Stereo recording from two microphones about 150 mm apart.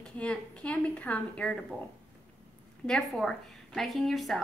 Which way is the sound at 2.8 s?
5° left (ahead or behind).